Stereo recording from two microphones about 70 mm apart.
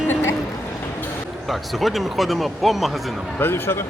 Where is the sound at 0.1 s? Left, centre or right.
Left.